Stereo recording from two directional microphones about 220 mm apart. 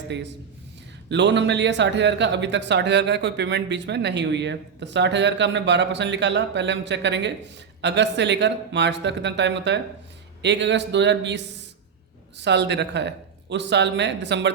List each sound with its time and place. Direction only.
1.1 s speech: 55° right (ahead or behind)